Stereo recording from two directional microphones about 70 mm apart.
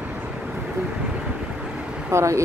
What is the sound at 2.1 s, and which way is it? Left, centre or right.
Speech, right.